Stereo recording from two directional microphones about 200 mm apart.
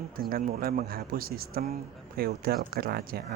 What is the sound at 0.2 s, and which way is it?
Speech, 45° right (ahead or behind).